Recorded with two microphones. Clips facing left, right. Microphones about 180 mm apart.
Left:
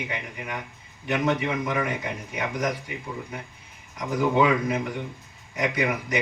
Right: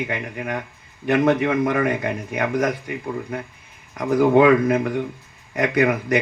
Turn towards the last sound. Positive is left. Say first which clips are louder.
# right 7 dB
turn(degrees=-55)  # may be behind; listen again after turning